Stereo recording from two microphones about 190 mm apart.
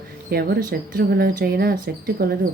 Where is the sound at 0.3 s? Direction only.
55° right (ahead or behind).